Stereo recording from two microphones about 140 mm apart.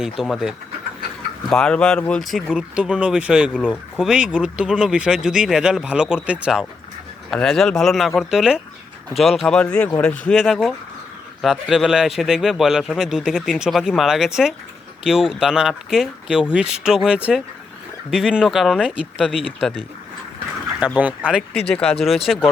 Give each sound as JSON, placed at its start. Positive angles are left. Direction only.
{"t": 0.0, "sound": "speech", "side_deg": -5}
{"t": 20.8, "sound": "speech", "side_deg": -10}
{"t": 21.7, "sound": "speech", "side_deg": 5}